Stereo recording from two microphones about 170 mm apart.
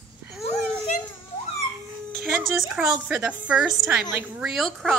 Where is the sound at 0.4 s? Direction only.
40° left (ahead or behind).